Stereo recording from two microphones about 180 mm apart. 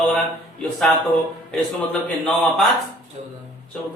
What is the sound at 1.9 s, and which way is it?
Speech, 10° left (ahead or behind).